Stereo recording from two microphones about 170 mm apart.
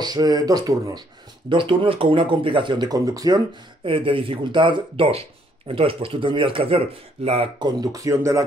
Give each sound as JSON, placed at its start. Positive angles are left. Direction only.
{"t": 0.0, "sound": "speech", "side_deg": -25}